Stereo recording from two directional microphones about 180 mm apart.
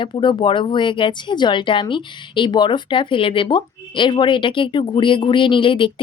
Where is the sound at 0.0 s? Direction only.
25° left (ahead or behind).